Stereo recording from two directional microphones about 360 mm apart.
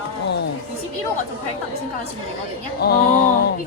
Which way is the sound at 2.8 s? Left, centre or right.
Left.